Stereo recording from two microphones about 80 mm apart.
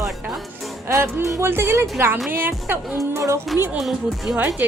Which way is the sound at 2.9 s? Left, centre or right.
Right.